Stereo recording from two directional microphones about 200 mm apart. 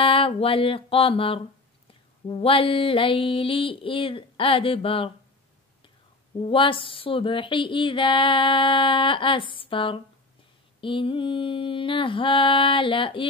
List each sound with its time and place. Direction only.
0.0 s speech: 25° left (ahead or behind)
6.4 s speech: 25° left (ahead or behind)